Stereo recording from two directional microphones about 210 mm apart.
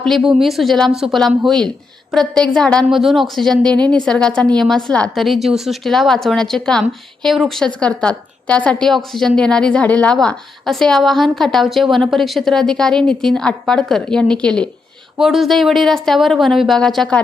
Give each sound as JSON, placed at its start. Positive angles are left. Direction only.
{"t": 0.0, "sound": "a woman's voice", "side_deg": 0}